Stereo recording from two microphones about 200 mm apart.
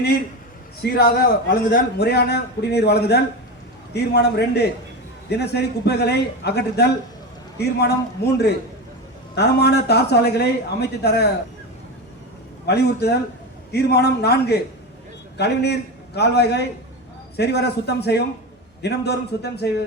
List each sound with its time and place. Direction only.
0.8 s a man's voice: 50° left (ahead or behind)
12.6 s a man's voice: 55° left (ahead or behind)